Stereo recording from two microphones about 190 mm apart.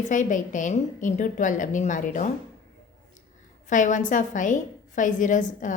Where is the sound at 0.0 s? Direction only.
40° left (ahead or behind).